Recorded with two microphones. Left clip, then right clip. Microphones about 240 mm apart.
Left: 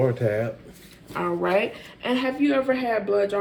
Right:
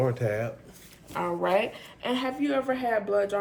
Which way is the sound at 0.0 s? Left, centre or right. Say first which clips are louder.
Left 4 dB; right.